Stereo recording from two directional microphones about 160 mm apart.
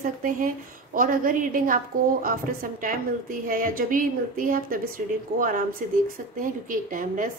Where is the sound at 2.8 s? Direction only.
60° right (ahead or behind).